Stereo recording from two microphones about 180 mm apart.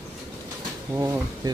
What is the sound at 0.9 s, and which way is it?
Speech, 15° right (ahead or behind).